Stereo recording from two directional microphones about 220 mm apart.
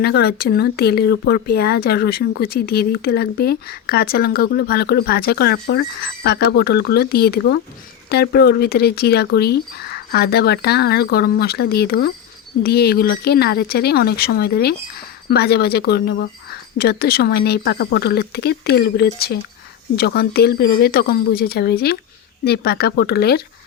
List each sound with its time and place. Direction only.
0.0 s speech: 45° left (ahead or behind)